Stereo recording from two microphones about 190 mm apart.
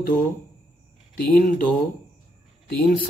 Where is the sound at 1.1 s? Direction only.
50° left (ahead or behind).